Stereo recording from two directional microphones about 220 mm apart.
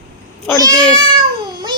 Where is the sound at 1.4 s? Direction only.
20° right (ahead or behind).